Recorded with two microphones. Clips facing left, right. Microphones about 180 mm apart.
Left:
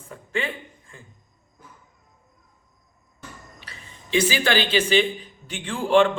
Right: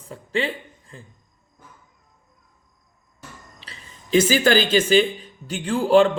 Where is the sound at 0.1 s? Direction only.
30° right (ahead or behind).